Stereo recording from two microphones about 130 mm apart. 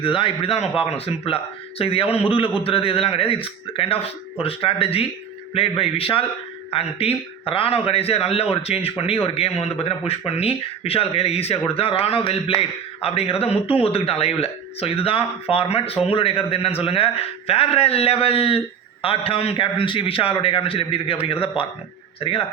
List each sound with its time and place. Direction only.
0.0 s a man's voice: 40° left (ahead or behind)